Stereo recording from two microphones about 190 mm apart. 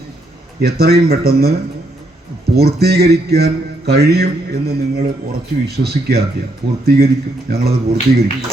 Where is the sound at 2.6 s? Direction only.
55° right (ahead or behind).